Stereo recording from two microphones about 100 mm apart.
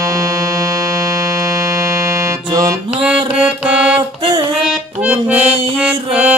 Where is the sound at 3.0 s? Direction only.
10° right (ahead or behind).